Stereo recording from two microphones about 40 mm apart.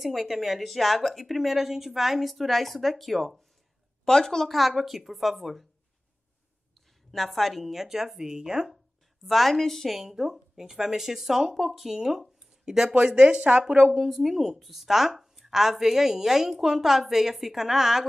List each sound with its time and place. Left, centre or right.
0.0 s a woman's voice: centre
4.0 s a woman's voice: centre
4.5 s a woman's voice: centre
7.1 s a woman's voice: centre
9.2 s a woman's voice: centre
9.9 s speech: centre
12.9 s speech: right
13.9 s speech: centre